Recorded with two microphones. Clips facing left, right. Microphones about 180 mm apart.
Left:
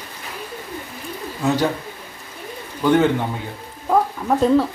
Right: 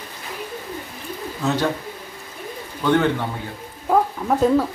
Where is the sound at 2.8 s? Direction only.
15° left (ahead or behind).